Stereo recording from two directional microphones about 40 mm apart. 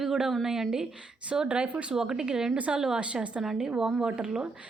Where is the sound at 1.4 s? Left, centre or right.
Right.